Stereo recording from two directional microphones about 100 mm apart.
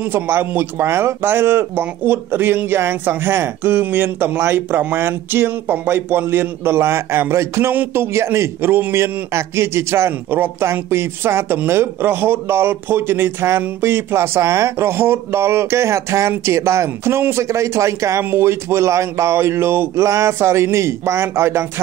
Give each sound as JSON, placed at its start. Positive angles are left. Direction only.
{"t": 0.0, "sound": "speech", "side_deg": -20}